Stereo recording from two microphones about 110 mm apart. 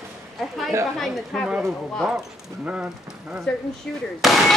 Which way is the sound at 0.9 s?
Centre (ahead or behind).